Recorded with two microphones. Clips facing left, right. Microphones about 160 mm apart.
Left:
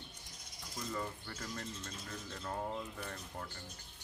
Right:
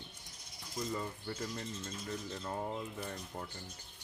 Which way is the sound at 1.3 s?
25° right (ahead or behind).